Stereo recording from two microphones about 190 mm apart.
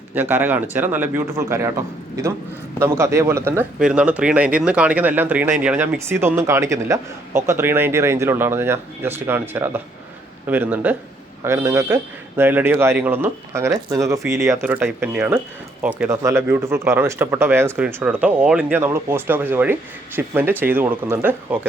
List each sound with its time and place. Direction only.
0.1 s speech: 10° right (ahead or behind)